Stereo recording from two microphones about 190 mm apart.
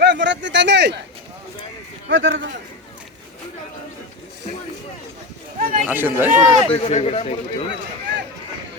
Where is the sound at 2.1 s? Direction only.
80° right.